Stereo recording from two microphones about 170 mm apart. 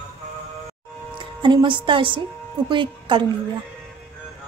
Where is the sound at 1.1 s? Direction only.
25° right (ahead or behind).